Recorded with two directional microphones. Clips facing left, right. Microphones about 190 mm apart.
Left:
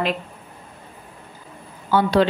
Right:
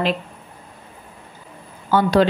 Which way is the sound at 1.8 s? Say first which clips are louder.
Right 1 dB; 45° right (ahead or behind).